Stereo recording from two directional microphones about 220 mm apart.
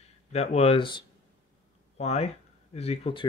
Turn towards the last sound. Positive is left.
turn(degrees=25)  # may be behind; listen again after turning